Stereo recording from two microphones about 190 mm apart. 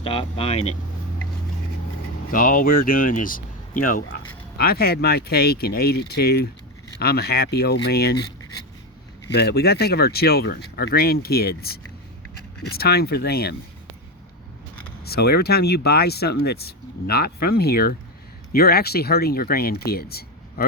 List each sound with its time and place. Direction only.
0.0 s speech: 30° left (ahead or behind)
2.3 s speech: 45° left (ahead or behind)
9.3 s speech: 60° left (ahead or behind)
12.7 s speech: 55° left (ahead or behind)
15.0 s speech: 55° left (ahead or behind)